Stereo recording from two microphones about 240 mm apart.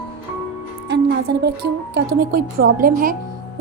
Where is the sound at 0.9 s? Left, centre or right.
Right.